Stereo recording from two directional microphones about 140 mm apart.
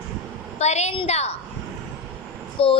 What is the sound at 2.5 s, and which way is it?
Speech, 40° left (ahead or behind).